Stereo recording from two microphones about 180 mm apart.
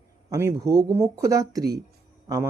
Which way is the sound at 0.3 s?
15° right (ahead or behind).